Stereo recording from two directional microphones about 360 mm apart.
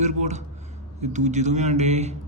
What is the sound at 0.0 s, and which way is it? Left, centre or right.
Speech, centre.